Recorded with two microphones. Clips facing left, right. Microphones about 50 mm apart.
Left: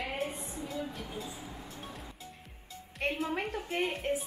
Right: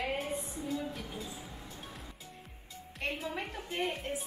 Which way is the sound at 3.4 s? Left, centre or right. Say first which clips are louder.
Left 3 dB; left.